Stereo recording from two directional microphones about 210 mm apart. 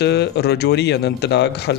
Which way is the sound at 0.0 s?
50° left (ahead or behind).